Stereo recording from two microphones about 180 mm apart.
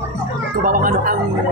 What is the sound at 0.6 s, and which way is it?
Speech, 50° right (ahead or behind).